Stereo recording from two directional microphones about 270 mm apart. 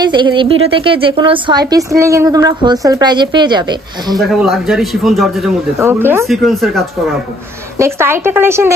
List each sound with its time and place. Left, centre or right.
0.0 s speech: centre
4.2 s a man's voice: centre
7.8 s speech: centre